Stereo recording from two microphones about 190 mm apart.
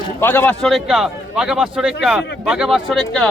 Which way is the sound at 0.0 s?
10° left (ahead or behind).